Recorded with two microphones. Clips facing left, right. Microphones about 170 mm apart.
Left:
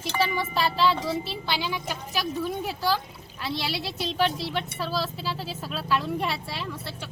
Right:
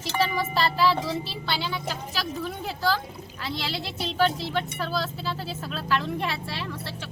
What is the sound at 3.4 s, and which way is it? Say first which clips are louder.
Speech: left 2 dB; 10° left (ahead or behind).